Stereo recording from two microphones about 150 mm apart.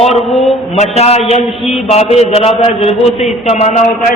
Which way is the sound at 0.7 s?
45° left (ahead or behind).